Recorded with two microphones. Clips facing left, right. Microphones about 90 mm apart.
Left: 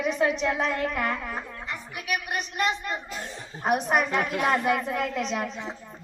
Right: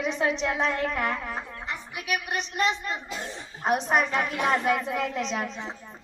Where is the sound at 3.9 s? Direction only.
35° right (ahead or behind).